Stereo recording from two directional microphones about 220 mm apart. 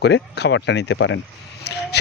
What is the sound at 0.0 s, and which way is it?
Speech, 50° left (ahead or behind).